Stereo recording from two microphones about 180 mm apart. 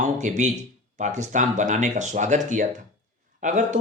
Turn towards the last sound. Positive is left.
turn(degrees=-45)  # may be behind; listen again after turning